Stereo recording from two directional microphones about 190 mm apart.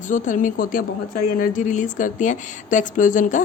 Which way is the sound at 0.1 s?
45° left (ahead or behind).